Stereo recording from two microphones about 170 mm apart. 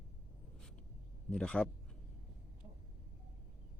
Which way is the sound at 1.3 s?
5° left (ahead or behind).